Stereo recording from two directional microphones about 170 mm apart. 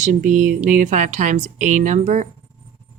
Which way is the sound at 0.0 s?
50° right (ahead or behind).